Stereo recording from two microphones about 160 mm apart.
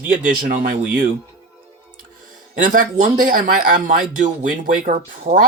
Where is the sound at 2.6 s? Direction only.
55° right (ahead or behind).